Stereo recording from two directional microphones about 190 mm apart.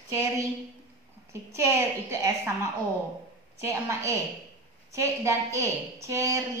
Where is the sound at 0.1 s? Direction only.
15° right (ahead or behind).